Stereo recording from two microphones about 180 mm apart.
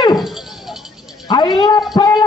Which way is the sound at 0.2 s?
Centre (ahead or behind).